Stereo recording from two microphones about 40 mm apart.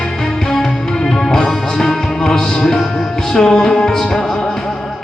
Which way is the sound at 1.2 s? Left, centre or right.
Centre.